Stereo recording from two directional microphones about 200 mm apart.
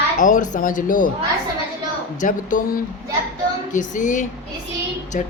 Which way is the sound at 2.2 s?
40° left (ahead or behind).